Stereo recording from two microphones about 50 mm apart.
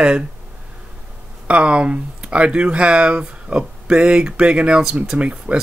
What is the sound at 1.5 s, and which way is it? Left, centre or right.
Speech, right.